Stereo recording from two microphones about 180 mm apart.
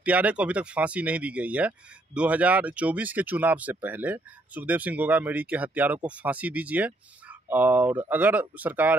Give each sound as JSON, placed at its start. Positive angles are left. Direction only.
{"t": 0.0, "sound": "speech", "side_deg": -10}